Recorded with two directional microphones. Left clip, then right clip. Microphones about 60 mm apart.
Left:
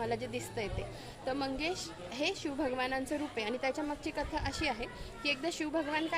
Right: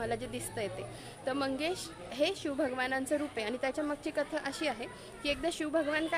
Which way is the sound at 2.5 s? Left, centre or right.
Right.